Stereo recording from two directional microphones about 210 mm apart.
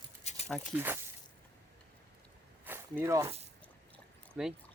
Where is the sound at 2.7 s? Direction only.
10° right (ahead or behind).